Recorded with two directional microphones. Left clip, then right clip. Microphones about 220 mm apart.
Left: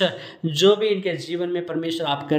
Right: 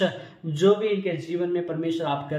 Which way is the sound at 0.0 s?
40° left (ahead or behind).